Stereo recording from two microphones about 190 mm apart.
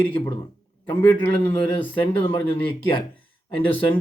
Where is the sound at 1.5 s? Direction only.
25° left (ahead or behind).